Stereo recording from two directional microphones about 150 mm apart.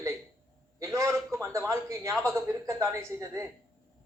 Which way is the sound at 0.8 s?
20° right (ahead or behind).